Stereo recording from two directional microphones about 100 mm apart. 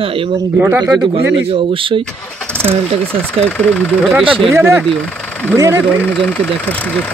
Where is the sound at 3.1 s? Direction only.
10° left (ahead or behind).